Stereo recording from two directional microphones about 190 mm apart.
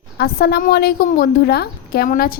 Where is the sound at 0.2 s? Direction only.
55° left (ahead or behind).